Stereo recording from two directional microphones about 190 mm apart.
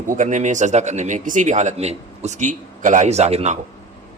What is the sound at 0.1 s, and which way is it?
Speech, 40° right (ahead or behind).